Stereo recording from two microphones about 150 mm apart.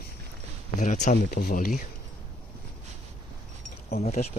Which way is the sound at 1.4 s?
70° left (ahead or behind).